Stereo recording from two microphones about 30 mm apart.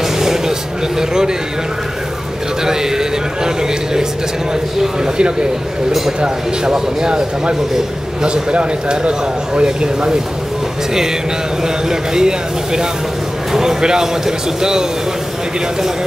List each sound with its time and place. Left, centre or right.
0.0 s a sound: centre
2.6 s a man's voice: centre
5.0 s speech: right
5.9 s speech: centre
8.2 s a man's voice: right
11.6 s speech: right
13.5 s a sound: centre
13.7 s speech: right